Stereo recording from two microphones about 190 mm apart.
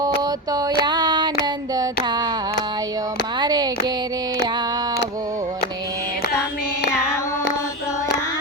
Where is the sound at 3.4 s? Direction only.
20° right (ahead or behind).